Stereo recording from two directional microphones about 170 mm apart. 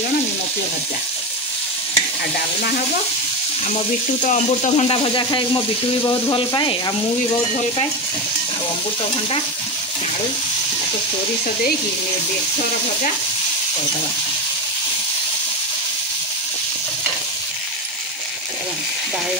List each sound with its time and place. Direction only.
4.3 s speech: 35° left (ahead or behind)